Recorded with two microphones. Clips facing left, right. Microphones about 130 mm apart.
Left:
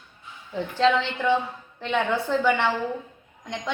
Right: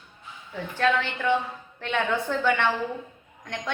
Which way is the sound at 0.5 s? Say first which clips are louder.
Left 3 dB; 20° left (ahead or behind).